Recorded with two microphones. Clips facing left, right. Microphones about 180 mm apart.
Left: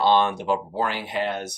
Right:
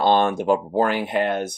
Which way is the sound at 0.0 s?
45° right (ahead or behind).